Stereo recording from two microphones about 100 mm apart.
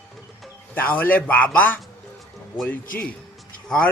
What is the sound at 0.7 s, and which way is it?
Speech, 15° left (ahead or behind).